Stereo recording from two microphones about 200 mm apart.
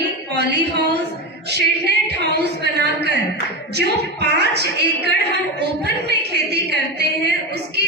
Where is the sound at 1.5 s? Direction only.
55° right (ahead or behind).